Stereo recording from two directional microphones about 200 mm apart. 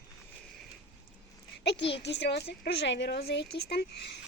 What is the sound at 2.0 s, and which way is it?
Speech, 60° left (ahead or behind).